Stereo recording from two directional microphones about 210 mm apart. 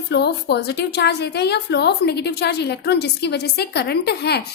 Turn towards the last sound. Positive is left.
turn(degrees=50)  # may be behind; listen again after turning